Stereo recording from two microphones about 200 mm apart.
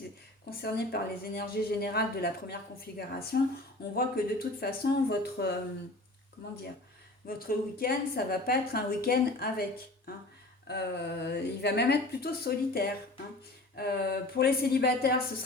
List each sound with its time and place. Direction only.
0.6 s a woman's voice: 50° left (ahead or behind)
7.3 s a woman's voice: 50° left (ahead or behind)